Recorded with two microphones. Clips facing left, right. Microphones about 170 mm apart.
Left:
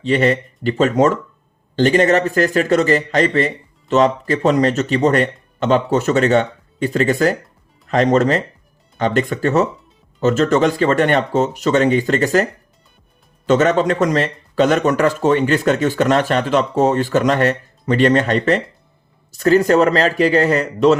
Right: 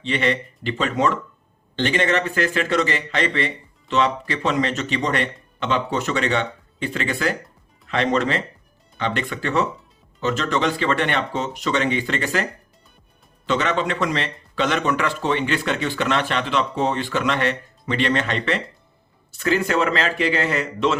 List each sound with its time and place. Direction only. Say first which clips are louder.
0.0 s speech: left 7 dB; 40° left (ahead or behind)
13.5 s speech: left 8 dB; 45° left (ahead or behind)